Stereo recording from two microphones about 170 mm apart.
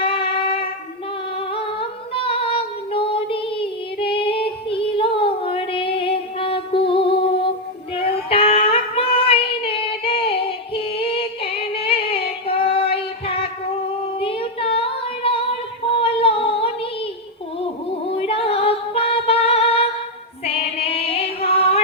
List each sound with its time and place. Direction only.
0.0 s a sound: 30° left (ahead or behind)
1.5 s singing: 30° left (ahead or behind)
7.9 s female singing: 35° left (ahead or behind)
10.8 s music: 35° left (ahead or behind)
14.2 s female singing: 35° left (ahead or behind)
16.0 s humming: 35° left (ahead or behind)
18.2 s music: 35° left (ahead or behind)
20.4 s female singing: 35° left (ahead or behind)